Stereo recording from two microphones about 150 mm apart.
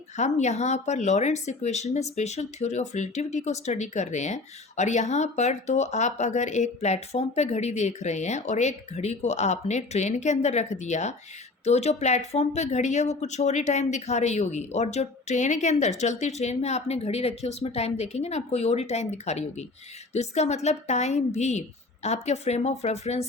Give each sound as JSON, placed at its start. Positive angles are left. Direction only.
{"t": 0.2, "sound": "speech", "side_deg": 50}